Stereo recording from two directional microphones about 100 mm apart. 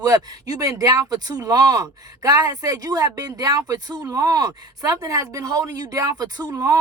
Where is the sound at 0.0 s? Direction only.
40° right (ahead or behind).